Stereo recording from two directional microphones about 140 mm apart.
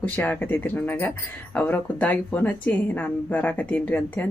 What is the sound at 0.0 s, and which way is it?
A woman's voice, 15° left (ahead or behind).